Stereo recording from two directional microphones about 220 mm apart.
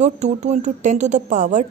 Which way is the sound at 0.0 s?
30° right (ahead or behind).